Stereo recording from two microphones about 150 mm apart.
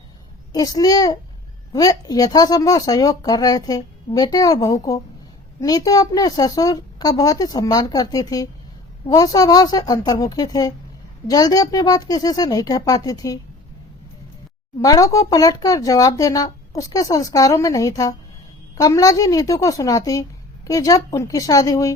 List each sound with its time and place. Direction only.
0.5 s speech: 25° left (ahead or behind)
14.8 s speech: 25° left (ahead or behind)